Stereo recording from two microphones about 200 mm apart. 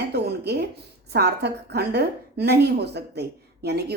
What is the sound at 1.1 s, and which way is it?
A woman's voice, 55° right (ahead or behind).